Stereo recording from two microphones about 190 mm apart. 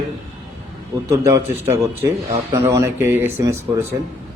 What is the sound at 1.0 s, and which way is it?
Speech, 15° right (ahead or behind).